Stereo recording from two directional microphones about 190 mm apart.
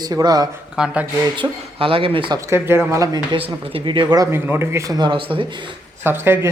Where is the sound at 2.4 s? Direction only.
10° right (ahead or behind).